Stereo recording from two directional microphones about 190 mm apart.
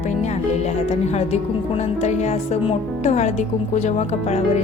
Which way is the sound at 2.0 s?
35° left (ahead or behind).